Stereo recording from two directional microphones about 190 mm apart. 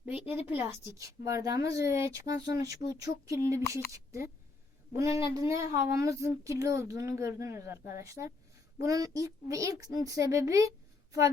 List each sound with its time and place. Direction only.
0.0 s a woman's voice: 10° right (ahead or behind)